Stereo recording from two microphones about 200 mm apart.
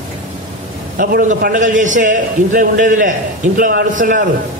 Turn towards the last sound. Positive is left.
turn(degrees=-40)  # may be behind; listen again after turning